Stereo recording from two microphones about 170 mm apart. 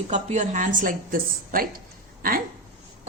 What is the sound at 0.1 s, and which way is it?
A woman's voice, 45° right (ahead or behind).